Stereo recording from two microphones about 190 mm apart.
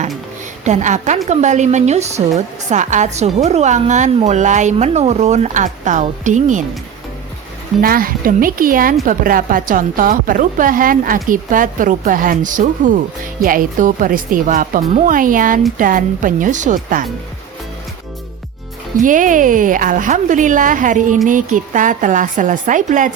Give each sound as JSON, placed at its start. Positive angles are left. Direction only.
{"t": 0.6, "sound": "a woman's voice", "side_deg": -40}
{"t": 7.8, "sound": "a woman's voice", "side_deg": -50}
{"t": 19.0, "sound": "a woman's voice", "side_deg": -45}